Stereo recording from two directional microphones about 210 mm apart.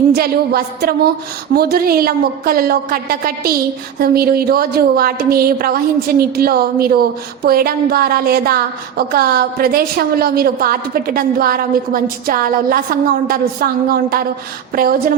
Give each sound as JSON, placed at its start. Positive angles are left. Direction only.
{"t": 0.1, "sound": "a woman's voice", "side_deg": -50}